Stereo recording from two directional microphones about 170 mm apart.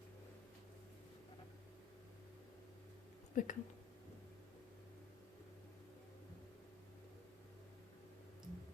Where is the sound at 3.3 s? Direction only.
50° left (ahead or behind).